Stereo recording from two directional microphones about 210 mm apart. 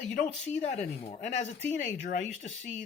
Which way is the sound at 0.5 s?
35° left (ahead or behind).